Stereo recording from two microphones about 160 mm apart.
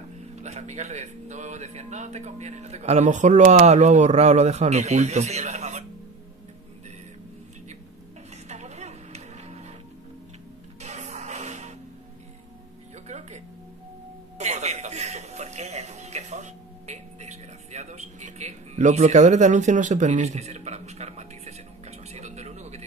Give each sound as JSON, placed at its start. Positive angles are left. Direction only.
{"t": 0.4, "sound": "speech", "side_deg": -45}
{"t": 8.5, "sound": "music", "side_deg": -45}
{"t": 10.8, "sound": "music", "side_deg": -45}
{"t": 14.4, "sound": "music", "side_deg": -45}